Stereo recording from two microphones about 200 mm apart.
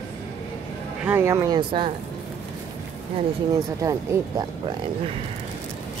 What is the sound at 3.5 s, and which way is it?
Speech, 15° right (ahead or behind).